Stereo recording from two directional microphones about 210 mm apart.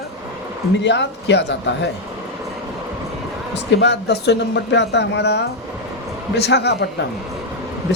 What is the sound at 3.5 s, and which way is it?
A man's voice, 55° left (ahead or behind).